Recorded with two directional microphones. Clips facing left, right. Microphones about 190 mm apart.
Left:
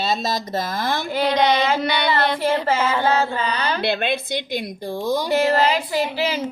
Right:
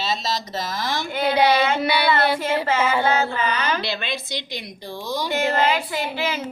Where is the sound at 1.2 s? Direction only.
10° right (ahead or behind).